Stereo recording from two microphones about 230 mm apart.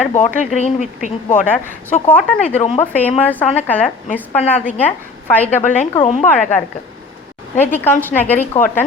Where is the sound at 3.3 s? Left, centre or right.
Centre.